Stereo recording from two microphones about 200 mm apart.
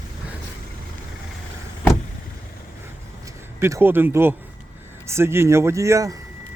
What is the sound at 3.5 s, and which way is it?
Speech, 10° right (ahead or behind).